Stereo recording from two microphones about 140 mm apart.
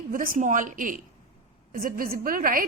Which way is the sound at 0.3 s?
65° right (ahead or behind).